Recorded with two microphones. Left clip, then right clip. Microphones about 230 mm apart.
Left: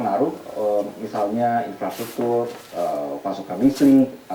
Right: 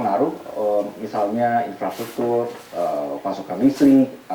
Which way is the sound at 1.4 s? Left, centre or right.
Centre.